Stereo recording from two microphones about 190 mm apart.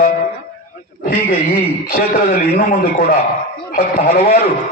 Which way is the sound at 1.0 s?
55° left (ahead or behind).